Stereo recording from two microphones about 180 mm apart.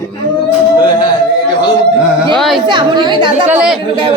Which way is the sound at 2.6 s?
25° right (ahead or behind).